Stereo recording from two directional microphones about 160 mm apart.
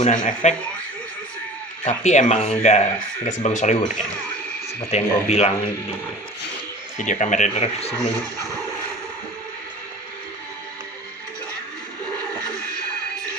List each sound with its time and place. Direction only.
0.0 s speech: 50° left (ahead or behind)
1.8 s speech: 45° left (ahead or behind)
6.9 s speech: 50° left (ahead or behind)